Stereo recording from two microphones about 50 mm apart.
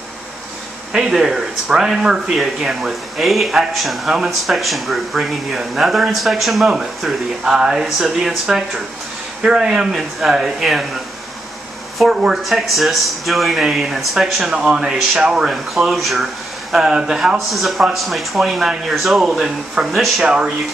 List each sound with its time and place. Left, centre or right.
0.9 s speech: centre
10.6 s speech: centre
12.4 s speech: centre
14.5 s speech: centre
15.4 s speech: centre
16.7 s speech: centre
19.9 s speech: centre
20.2 s speech: right